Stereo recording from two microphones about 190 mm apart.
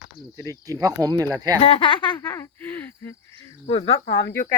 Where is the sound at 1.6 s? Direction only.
30° left (ahead or behind).